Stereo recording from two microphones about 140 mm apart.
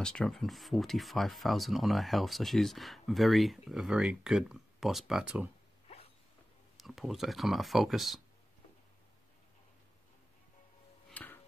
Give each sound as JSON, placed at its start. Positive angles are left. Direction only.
{"t": 0.0, "sound": "speech", "side_deg": 5}
{"t": 5.9, "sound": "a sound", "side_deg": 45}
{"t": 6.8, "sound": "speech", "side_deg": 0}
{"t": 11.1, "sound": "music", "side_deg": 10}